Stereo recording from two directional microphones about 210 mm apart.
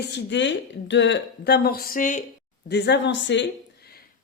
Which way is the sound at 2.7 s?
55° left (ahead or behind).